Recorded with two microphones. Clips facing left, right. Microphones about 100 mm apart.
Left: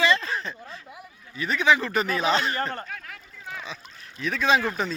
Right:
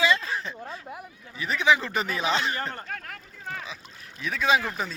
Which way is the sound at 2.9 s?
50° right (ahead or behind).